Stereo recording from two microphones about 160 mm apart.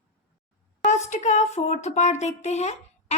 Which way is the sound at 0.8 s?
45° left (ahead or behind).